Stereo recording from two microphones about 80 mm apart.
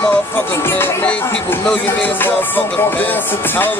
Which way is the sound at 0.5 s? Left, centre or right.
Left.